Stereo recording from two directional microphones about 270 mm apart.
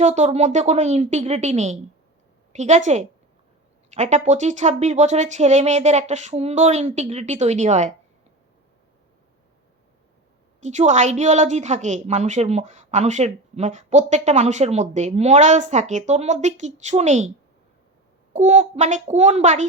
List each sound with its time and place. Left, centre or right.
0.0 s a woman's voice: right
10.6 s a woman's voice: right
18.3 s a woman's voice: right